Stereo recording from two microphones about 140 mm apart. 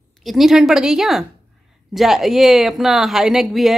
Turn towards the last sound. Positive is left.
turn(degrees=0)  # may be behind; listen again after turning